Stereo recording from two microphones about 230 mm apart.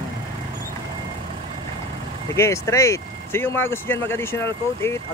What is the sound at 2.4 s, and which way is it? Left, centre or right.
Speech, centre.